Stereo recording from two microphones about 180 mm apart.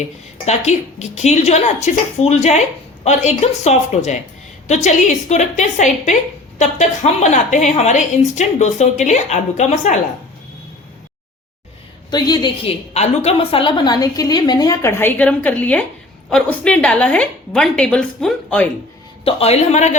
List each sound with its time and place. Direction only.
0.4 s a woman's voice: 40° left (ahead or behind)
12.1 s a woman's voice: 20° left (ahead or behind)
12.9 s a woman's voice: 35° left (ahead or behind); by 18.7 s 5° left (ahead or behind)
19.2 s a woman's voice: 35° left (ahead or behind)